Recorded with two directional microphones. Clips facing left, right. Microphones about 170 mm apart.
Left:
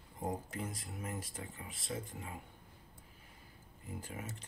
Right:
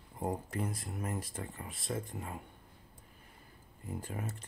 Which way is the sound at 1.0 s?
45° right (ahead or behind).